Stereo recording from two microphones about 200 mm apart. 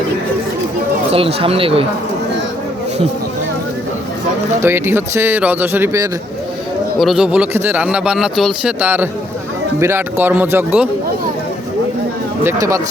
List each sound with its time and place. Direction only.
1.1 s speech: 30° right (ahead or behind)
4.6 s speech: 10° right (ahead or behind)
7.0 s speech: centre (ahead or behind)
12.5 s speech: 15° right (ahead or behind)